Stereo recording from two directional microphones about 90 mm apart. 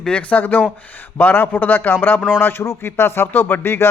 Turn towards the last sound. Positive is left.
turn(degrees=25)  # may be behind; listen again after turning